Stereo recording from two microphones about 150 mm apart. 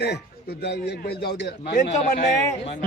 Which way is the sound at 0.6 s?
90° left.